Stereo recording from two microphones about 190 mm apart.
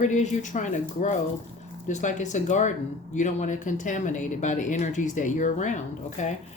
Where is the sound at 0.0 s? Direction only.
40° left (ahead or behind).